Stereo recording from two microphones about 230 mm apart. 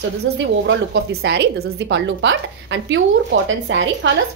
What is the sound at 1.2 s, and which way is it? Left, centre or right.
A woman's voice, right.